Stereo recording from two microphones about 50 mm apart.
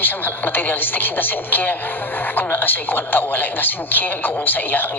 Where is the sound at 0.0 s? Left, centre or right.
Left.